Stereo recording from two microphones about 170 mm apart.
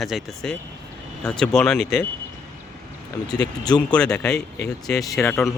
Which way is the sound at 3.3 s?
25° left (ahead or behind).